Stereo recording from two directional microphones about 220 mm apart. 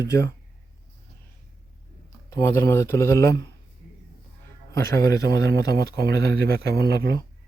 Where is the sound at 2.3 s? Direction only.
10° left (ahead or behind).